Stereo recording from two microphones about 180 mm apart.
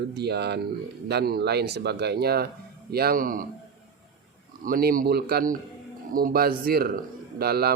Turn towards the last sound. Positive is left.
turn(degrees=-60)  # may be behind; listen again after turning